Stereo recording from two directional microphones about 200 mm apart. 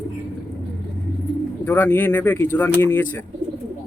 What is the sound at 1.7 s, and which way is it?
Speech, 10° left (ahead or behind).